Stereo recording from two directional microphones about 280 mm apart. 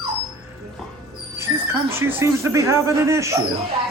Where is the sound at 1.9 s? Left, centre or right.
Centre.